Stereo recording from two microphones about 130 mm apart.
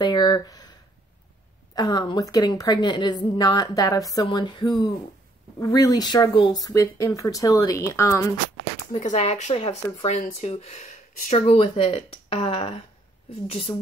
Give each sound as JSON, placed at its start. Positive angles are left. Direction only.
{"t": 0.0, "sound": "speech", "side_deg": 35}
{"t": 1.8, "sound": "a woman's voice", "side_deg": 30}
{"t": 8.9, "sound": "speech", "side_deg": 55}